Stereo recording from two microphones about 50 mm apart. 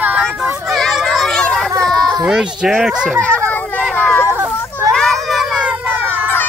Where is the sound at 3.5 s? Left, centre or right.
Left.